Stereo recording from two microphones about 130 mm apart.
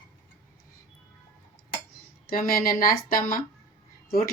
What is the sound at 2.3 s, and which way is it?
Speech, 90° left.